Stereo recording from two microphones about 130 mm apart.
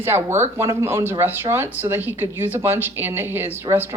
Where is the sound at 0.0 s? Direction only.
15° right (ahead or behind).